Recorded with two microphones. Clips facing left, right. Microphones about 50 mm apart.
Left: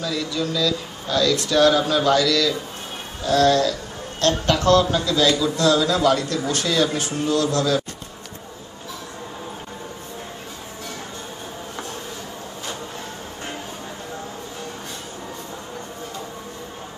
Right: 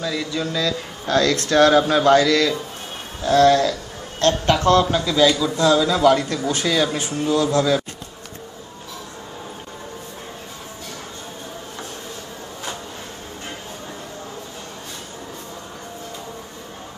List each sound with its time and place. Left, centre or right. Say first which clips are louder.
0.0 s speech: even; centre
1.0 s a man's voice: right 2 dB; right; by 7.8 s centre